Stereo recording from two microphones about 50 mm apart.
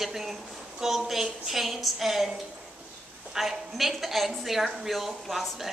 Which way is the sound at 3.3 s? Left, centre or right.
Centre.